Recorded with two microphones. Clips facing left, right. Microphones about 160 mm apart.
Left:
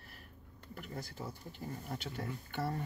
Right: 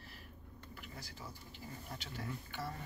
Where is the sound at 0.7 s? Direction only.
50° left (ahead or behind).